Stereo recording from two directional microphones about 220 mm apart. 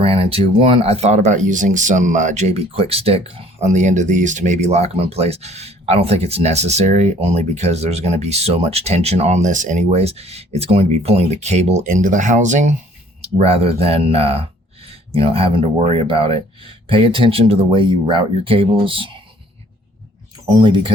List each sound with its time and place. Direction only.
0.0 s speech: 25° right (ahead or behind)
20.5 s speech: 20° right (ahead or behind)